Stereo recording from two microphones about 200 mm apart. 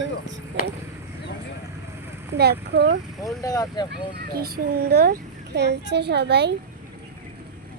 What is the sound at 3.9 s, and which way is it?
A child's voice, 50° right (ahead or behind).